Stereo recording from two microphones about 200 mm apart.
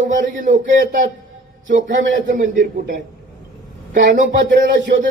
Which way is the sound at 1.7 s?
65° right (ahead or behind).